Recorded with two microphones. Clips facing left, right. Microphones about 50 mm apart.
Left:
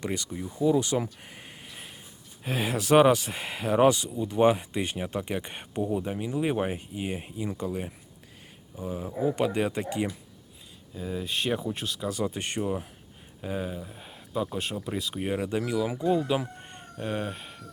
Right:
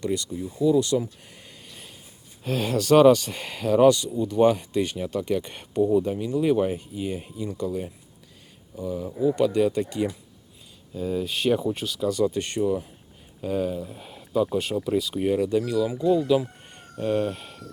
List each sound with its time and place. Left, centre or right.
0.0 s speech: left
1.5 s a sound: left
2.4 s speech: centre
10.9 s speech: centre
11.9 s speech: centre
13.4 s speech: centre
15.3 s speech: left
17.0 s speech: centre